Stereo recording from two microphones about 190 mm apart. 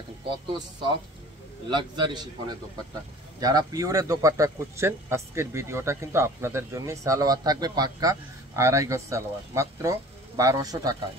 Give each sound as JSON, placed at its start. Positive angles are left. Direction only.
{"t": 1.7, "sound": "a man's voice", "side_deg": -25}